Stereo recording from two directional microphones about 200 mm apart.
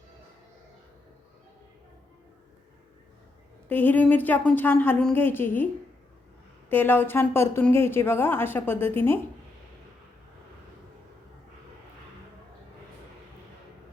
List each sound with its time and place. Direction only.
3.7 s speech: 10° left (ahead or behind)
6.7 s speech: 10° left (ahead or behind)